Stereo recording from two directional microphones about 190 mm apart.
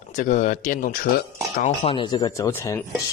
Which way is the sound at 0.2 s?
40° left (ahead or behind).